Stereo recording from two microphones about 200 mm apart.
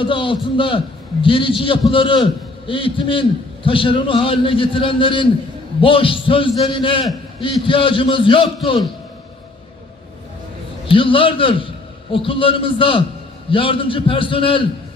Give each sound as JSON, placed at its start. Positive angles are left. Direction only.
{"t": 0.0, "sound": "a man's voice", "side_deg": 25}
{"t": 10.9, "sound": "a man's voice", "side_deg": 25}